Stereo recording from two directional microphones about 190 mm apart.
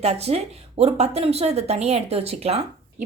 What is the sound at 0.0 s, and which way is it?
Speech, 35° right (ahead or behind).